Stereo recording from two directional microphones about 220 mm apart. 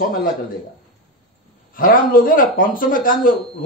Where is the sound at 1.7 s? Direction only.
40° left (ahead or behind).